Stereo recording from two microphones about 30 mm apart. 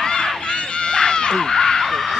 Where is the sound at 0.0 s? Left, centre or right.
Centre.